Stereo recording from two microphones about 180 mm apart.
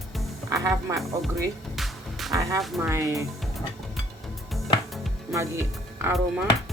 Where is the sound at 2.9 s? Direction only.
15° right (ahead or behind).